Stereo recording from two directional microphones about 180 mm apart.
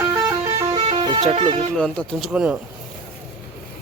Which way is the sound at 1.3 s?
30° right (ahead or behind).